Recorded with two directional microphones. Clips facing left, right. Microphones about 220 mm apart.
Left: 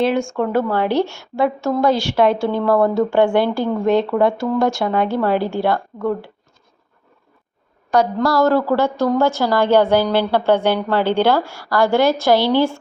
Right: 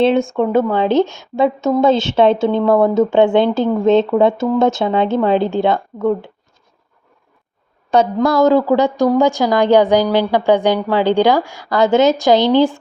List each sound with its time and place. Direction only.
0.0 s a woman's voice: 25° right (ahead or behind)
7.9 s a woman's voice: 20° right (ahead or behind)